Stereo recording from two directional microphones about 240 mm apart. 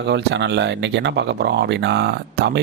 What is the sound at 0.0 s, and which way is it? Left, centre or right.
Speech, right.